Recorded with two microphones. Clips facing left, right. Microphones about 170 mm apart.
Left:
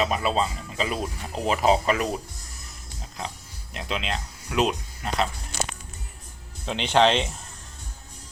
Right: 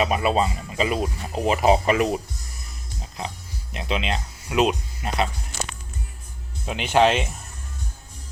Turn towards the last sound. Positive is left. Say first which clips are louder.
# right 1 dB
turn(degrees=-10)  # may be behind; listen again after turning